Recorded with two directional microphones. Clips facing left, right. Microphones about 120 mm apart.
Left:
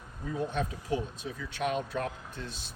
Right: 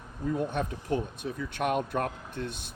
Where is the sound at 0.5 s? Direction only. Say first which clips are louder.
Right 2 dB; 50° right (ahead or behind).